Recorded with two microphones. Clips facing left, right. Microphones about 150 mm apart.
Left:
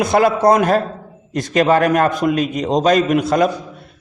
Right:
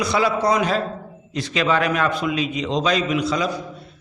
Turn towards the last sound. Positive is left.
turn(degrees=50)  # may be behind; listen again after turning